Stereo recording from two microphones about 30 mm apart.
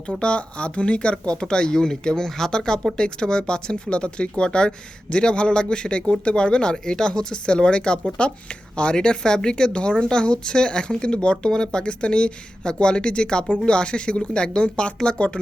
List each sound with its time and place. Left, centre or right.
0.2 s speech: left